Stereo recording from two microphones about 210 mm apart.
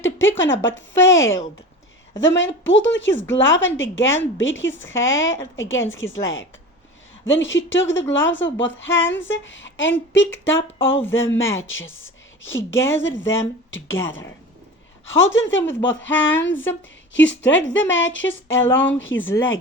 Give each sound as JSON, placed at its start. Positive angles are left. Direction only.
{"t": 0.0, "sound": "speech", "side_deg": 65}
{"t": 2.1, "sound": "speech", "side_deg": 60}
{"t": 7.3, "sound": "speech", "side_deg": 65}
{"t": 12.5, "sound": "a woman's voice", "side_deg": 10}
{"t": 12.9, "sound": "speech", "side_deg": 65}
{"t": 15.1, "sound": "speech", "side_deg": 65}
{"t": 18.7, "sound": "a woman's voice", "side_deg": 10}
{"t": 18.9, "sound": "speech", "side_deg": 65}
{"t": 19.2, "sound": "a woman's voice", "side_deg": 10}